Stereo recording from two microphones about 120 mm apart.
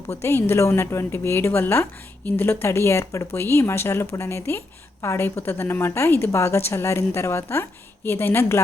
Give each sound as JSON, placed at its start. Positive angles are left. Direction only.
{"t": 0.1, "sound": "a woman's voice", "side_deg": 20}